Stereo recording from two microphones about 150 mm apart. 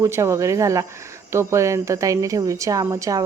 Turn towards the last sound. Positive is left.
turn(degrees=-20)  # may be behind; listen again after turning